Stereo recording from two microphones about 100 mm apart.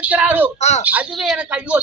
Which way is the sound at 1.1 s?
5° right (ahead or behind).